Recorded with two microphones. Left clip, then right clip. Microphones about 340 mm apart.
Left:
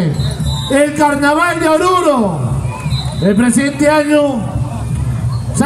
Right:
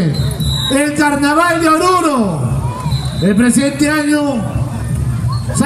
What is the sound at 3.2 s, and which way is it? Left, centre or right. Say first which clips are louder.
A man's voice: even; left.